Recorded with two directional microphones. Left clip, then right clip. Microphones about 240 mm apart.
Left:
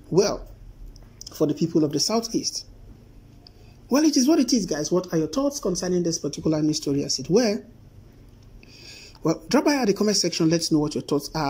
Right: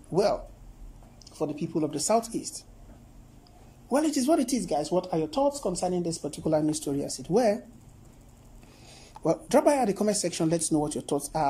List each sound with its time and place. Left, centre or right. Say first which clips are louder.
0.1 s speech: left 3 dB; centre
1.6 s speech: left 8 dB; centre
3.9 s speech: left 5 dB; centre
5.9 s speech: left 6 dB; centre
6.2 s speech: left 2 dB; centre
8.8 s speech: left 2 dB; centre